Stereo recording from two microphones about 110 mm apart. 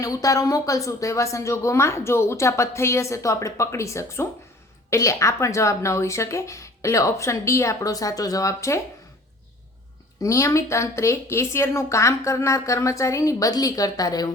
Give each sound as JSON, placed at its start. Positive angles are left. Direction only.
{"t": 0.0, "sound": "speech", "side_deg": 30}
{"t": 10.2, "sound": "speech", "side_deg": 30}